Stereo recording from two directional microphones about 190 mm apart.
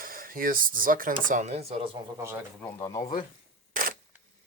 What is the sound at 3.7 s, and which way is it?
Camera, 45° right (ahead or behind).